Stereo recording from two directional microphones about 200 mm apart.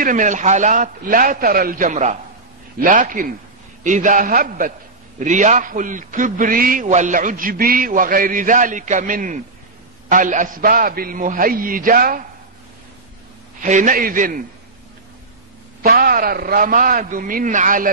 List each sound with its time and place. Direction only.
0.0 s a man's voice: 40° right (ahead or behind)
13.6 s a man's voice: 40° right (ahead or behind)
15.8 s a man's voice: 50° right (ahead or behind)